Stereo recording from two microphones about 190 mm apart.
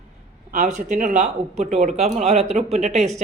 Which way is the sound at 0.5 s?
40° right (ahead or behind).